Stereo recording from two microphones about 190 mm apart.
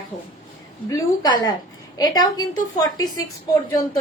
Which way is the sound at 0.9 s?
20° left (ahead or behind).